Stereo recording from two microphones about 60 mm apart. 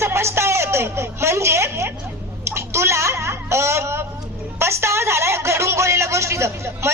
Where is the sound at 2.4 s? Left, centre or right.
Right.